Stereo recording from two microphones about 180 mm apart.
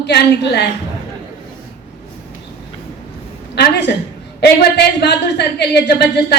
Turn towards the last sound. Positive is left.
turn(degrees=65)  # may be behind; listen again after turning